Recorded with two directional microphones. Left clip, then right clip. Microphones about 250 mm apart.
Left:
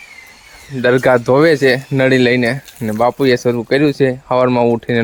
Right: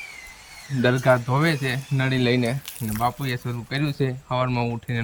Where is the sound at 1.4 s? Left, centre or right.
Centre.